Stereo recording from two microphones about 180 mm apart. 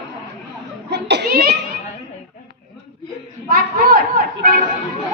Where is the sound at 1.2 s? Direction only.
50° right (ahead or behind).